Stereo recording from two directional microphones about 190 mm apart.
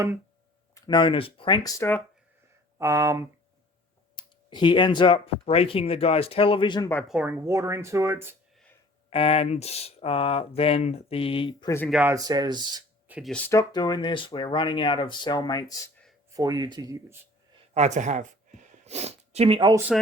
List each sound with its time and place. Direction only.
0.7 s speech: 25° left (ahead or behind)
2.7 s speech: 15° right (ahead or behind)
4.1 s speech: 25° left (ahead or behind)
7.1 s speech: 10° right (ahead or behind)
9.0 s speech: 30° left (ahead or behind)
11.9 s speech: 5° right (ahead or behind)
12.1 s speech: 20° right (ahead or behind)
13.1 s a sound: 5° right (ahead or behind)
13.5 s speech: 20° left (ahead or behind)
16.3 s speech: 20° right (ahead or behind)
17.7 s speech: 40° right (ahead or behind)